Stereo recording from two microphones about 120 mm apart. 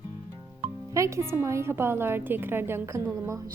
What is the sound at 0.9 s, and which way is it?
A woman's voice, 25° right (ahead or behind).